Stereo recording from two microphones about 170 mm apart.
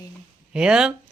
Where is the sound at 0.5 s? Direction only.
5° right (ahead or behind).